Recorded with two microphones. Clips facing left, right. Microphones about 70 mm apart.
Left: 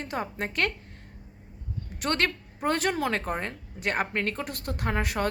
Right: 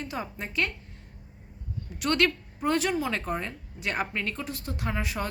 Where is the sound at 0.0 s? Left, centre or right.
Left.